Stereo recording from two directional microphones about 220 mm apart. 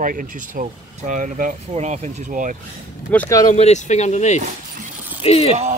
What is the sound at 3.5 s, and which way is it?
Speech, 30° left (ahead or behind).